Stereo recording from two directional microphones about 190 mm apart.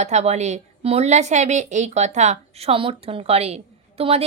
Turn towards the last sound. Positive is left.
turn(degrees=-30)  # may be behind; listen again after turning